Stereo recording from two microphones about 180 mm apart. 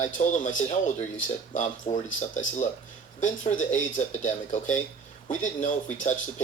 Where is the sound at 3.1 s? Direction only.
45° left (ahead or behind).